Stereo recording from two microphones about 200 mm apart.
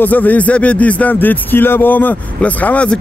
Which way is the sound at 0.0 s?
10° left (ahead or behind).